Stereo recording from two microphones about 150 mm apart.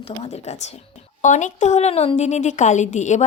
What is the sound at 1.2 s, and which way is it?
A woman's voice, 55° left (ahead or behind).